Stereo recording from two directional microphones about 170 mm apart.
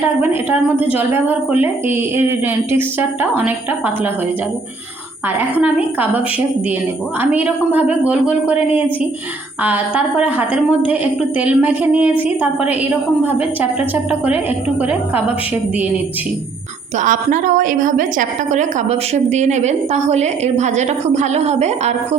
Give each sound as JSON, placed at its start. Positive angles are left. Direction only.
{"t": 0.0, "sound": "a woman's voice", "side_deg": -10}
{"t": 5.4, "sound": "a woman's voice", "side_deg": -10}
{"t": 9.6, "sound": "a woman's voice", "side_deg": -10}
{"t": 17.0, "sound": "a woman's voice", "side_deg": -50}